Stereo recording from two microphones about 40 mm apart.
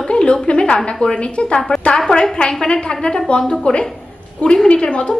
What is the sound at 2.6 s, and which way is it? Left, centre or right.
A woman's voice, left.